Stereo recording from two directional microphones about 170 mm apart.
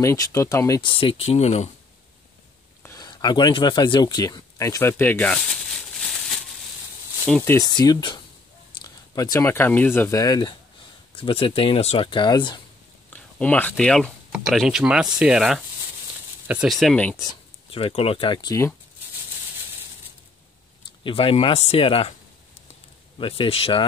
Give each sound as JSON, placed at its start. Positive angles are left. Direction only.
{"t": 0.0, "sound": "speech", "side_deg": 20}
{"t": 2.8, "sound": "a sound", "side_deg": 20}
{"t": 7.2, "sound": "speech", "side_deg": 5}
{"t": 7.5, "sound": "speech", "side_deg": 25}
{"t": 13.1, "sound": "speech", "side_deg": 10}
{"t": 17.2, "sound": "speech", "side_deg": 30}
{"t": 21.0, "sound": "speech", "side_deg": 30}
{"t": 23.1, "sound": "speech", "side_deg": 30}